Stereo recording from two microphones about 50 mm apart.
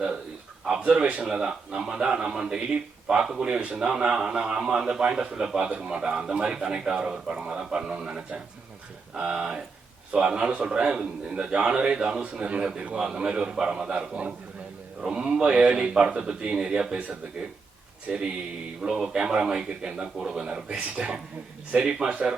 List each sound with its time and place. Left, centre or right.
0.9 s a man's voice: centre